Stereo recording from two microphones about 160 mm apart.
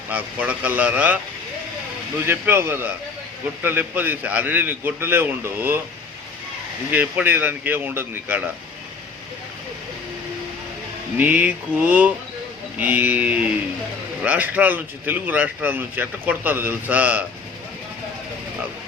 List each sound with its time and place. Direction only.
0.1 s a man's voice: 10° right (ahead or behind)
2.2 s a man's voice: 15° right (ahead or behind)
6.9 s a man's voice: 10° right (ahead or behind)
11.2 s a man's voice: 10° right (ahead or behind)